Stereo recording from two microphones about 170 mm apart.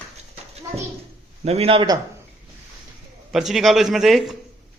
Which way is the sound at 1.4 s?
35° right (ahead or behind).